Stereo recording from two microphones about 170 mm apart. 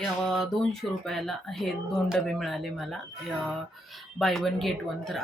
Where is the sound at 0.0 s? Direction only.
Centre (ahead or behind).